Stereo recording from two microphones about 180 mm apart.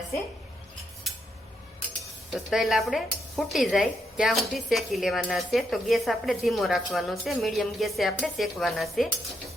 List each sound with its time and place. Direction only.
2.3 s speech: centre (ahead or behind)